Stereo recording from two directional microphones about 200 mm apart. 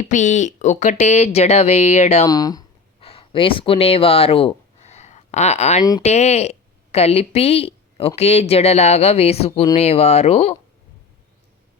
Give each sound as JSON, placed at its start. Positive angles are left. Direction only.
{"t": 0.0, "sound": "a woman's voice", "side_deg": 35}
{"t": 2.2, "sound": "a sound", "side_deg": 20}
{"t": 6.0, "sound": "a woman's voice", "side_deg": 35}